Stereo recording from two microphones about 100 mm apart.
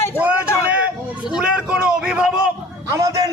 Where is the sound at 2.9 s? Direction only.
30° right (ahead or behind).